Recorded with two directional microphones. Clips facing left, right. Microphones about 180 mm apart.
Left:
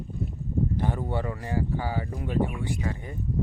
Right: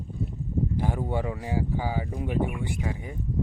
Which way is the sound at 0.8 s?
10° right (ahead or behind).